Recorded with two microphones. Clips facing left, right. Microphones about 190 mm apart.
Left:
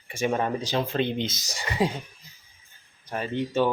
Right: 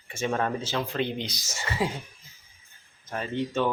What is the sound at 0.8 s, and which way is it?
Speech, 25° left (ahead or behind).